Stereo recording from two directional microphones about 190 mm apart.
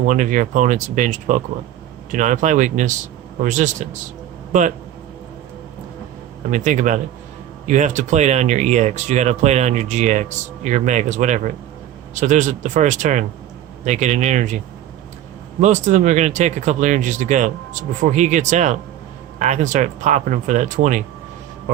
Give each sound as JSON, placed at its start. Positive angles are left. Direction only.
{"t": 0.1, "sound": "speech", "side_deg": -40}
{"t": 6.5, "sound": "speech", "side_deg": -40}
{"t": 15.6, "sound": "speech", "side_deg": -40}